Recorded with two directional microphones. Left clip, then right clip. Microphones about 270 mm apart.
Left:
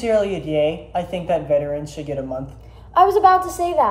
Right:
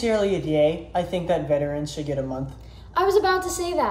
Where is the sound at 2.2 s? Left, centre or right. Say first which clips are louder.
Left 3 dB; right.